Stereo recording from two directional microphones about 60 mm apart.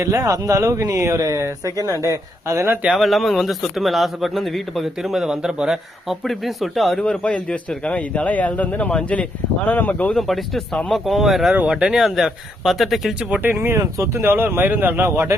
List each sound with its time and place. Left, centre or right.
0.0 s speech: right
2.9 s speech: centre
7.0 s a man's voice: centre
9.6 s a man's voice: left
10.2 s speech: centre
13.4 s speech: right
14.2 s speech: right
15.0 s speech: right